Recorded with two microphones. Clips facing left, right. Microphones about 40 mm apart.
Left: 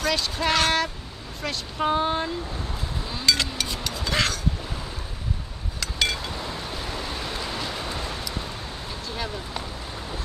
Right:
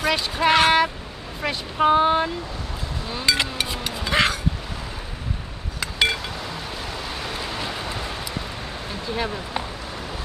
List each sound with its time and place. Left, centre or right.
0.0 s speech: right
3.1 s music: centre
5.8 s a sound: right
9.1 s speech: right